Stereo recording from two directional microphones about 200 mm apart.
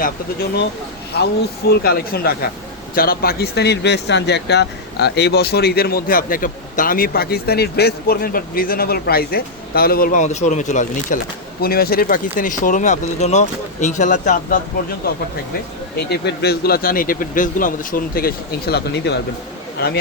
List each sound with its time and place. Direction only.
1.7 s speech: 50° left (ahead or behind)
11.6 s speech: 50° left (ahead or behind)
16.0 s speech: 55° left (ahead or behind)